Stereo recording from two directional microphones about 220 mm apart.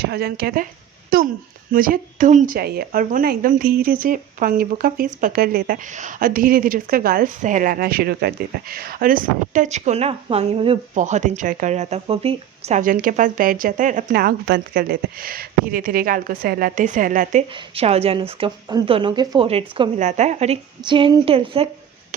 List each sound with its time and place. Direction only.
0.0 s speech: 45° right (ahead or behind)
17.5 s speech: 25° right (ahead or behind)